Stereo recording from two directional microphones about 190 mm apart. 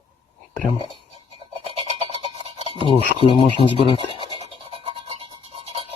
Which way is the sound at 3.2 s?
30° left (ahead or behind).